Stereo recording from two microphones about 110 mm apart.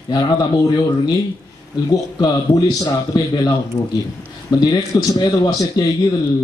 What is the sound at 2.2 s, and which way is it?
Speech, 30° left (ahead or behind).